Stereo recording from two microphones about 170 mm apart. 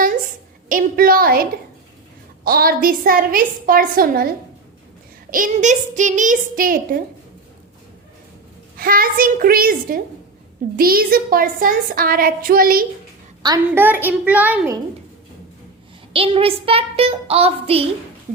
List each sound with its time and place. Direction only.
0.7 s a sound: 55° right (ahead or behind)
2.4 s a woman's voice: 60° right (ahead or behind)
5.3 s a child's voice: 50° right (ahead or behind)
8.8 s a woman's voice: 55° right (ahead or behind)
13.7 s a child's voice: 10° right (ahead or behind)
16.1 s a child's voice: 35° right (ahead or behind)